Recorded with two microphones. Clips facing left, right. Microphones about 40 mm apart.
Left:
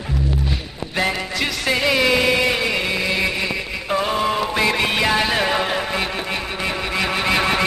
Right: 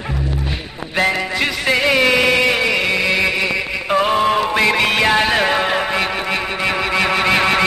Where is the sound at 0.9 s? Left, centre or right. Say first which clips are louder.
Right 4 dB; right.